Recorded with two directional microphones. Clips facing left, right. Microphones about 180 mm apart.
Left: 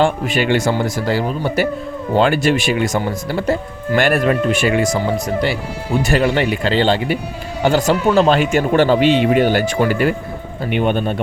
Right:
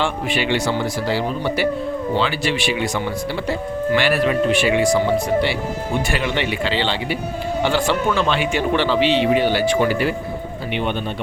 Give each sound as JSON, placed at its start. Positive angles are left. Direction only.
{"t": 0.0, "sound": "speech", "side_deg": 45}